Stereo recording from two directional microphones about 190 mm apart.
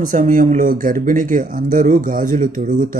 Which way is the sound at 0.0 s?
45° right (ahead or behind).